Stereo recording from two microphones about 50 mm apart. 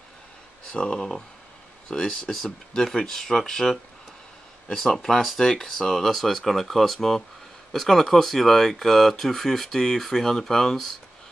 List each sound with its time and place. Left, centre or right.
0.7 s speech: centre